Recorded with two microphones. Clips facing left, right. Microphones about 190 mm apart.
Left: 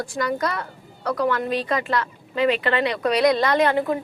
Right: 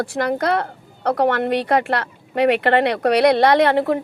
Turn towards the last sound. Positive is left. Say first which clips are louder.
# right 4 dB
turn(degrees=-70)  # may be behind; listen again after turning